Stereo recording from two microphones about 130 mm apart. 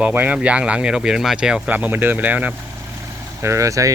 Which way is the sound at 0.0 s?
15° right (ahead or behind).